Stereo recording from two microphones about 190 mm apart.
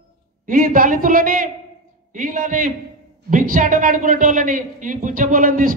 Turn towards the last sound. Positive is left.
turn(degrees=-45)  # may be behind; listen again after turning